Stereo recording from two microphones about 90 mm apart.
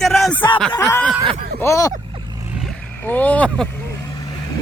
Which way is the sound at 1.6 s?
30° left (ahead or behind).